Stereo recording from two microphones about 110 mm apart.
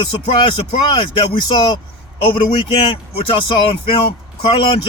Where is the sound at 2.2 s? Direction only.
50° left (ahead or behind).